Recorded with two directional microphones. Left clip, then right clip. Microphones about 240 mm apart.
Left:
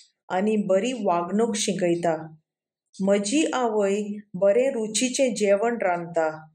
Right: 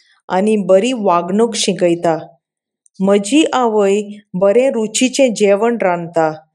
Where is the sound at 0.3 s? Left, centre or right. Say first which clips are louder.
Right 11 dB; right.